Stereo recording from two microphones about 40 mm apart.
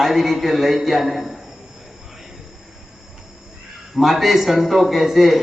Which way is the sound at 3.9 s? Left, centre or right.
Centre.